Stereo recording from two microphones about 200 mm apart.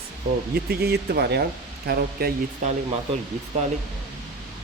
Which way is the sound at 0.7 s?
50° right (ahead or behind).